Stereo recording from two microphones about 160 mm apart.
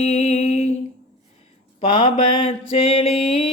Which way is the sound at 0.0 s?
45° left (ahead or behind).